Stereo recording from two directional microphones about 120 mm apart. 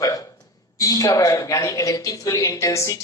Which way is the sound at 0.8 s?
30° left (ahead or behind).